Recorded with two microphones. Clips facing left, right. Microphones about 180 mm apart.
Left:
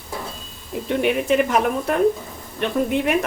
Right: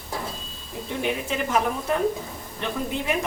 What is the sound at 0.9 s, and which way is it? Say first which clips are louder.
A woman's voice: left 8 dB; 65° left (ahead or behind).